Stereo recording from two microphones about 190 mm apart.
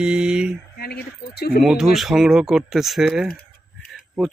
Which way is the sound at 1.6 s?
Centre (ahead or behind).